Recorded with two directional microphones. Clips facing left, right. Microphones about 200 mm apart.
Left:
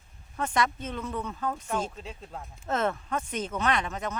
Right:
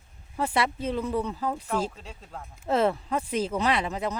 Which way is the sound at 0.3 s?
30° right (ahead or behind).